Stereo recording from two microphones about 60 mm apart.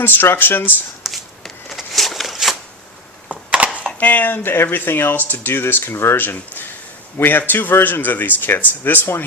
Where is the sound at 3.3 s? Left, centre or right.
Right.